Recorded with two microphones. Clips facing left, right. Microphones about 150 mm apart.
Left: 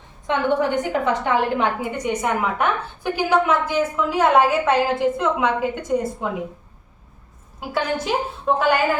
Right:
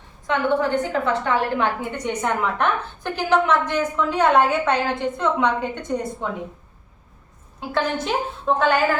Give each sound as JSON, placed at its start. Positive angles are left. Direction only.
{"t": 0.3, "sound": "a woman's voice", "side_deg": 15}
{"t": 7.7, "sound": "a woman's voice", "side_deg": 10}